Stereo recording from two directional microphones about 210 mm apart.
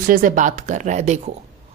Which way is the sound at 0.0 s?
40° right (ahead or behind).